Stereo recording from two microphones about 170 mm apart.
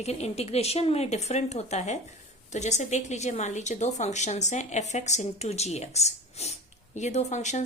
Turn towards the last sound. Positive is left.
turn(degrees=45)  # may be behind; listen again after turning